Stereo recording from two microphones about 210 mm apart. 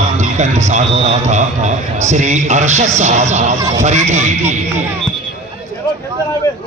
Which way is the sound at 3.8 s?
35° right (ahead or behind).